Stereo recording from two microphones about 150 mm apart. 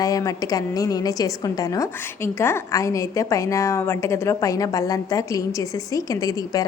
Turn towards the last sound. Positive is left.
turn(degrees=25)  # may be behind; listen again after turning